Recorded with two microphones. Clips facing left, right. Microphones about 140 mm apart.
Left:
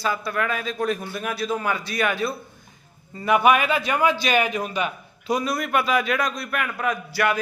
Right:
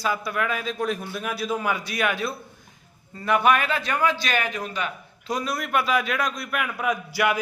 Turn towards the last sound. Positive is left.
turn(degrees=-10)  # may be behind; listen again after turning